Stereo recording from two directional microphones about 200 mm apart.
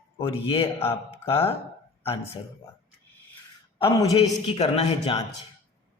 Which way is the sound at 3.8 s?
25° left (ahead or behind).